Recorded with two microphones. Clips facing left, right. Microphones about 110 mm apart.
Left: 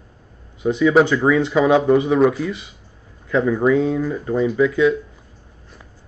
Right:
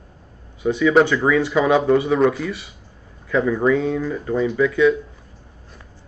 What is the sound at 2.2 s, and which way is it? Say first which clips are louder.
Speech: left 2 dB; 5° left (ahead or behind).